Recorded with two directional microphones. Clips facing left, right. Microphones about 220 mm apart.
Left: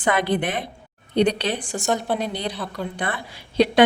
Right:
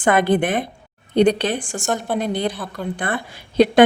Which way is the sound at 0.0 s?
50° right (ahead or behind).